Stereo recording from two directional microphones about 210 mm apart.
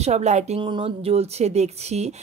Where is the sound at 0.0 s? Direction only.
30° right (ahead or behind).